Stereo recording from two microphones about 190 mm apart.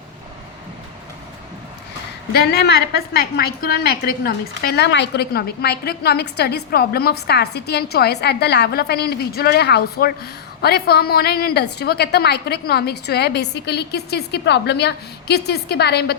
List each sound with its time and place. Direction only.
2.3 s a woman's voice: 55° left (ahead or behind)